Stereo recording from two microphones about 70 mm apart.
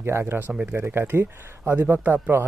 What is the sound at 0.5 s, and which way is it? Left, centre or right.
Speech, centre.